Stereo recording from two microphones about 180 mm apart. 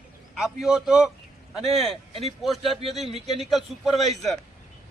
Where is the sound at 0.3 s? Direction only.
Centre (ahead or behind).